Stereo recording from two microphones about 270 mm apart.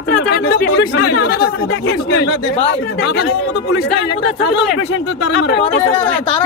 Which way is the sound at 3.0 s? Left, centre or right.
Left.